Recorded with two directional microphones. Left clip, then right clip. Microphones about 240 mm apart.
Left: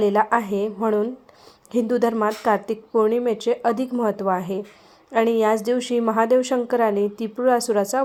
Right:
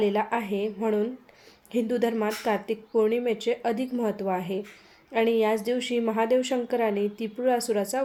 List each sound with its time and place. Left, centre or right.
0.0 s a woman's voice: centre